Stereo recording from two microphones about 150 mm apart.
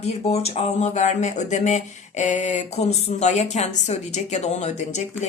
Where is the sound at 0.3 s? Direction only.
45° left (ahead or behind).